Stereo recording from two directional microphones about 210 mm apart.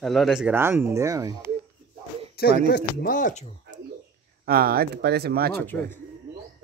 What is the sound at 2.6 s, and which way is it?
Speech, 45° left (ahead or behind).